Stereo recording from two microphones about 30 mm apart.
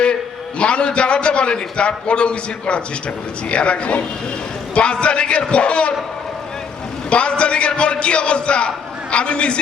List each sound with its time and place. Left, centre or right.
0.6 s a man's voice: left
7.1 s a man's voice: left